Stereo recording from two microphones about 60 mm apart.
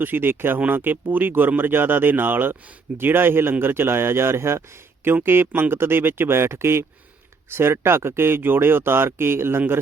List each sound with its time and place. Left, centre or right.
0.0 s speech: right